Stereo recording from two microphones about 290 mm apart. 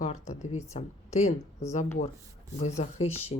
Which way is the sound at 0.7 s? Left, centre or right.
Left.